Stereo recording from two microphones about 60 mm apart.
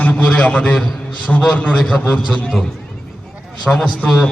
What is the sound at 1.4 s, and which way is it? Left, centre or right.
Speech, centre.